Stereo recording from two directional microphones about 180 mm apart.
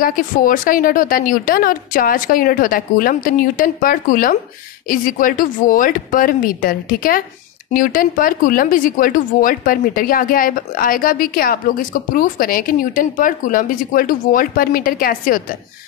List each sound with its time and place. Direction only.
0.0 s speech: 50° left (ahead or behind)